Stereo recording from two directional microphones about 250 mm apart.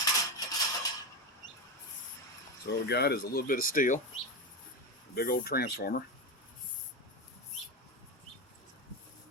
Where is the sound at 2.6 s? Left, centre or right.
Left.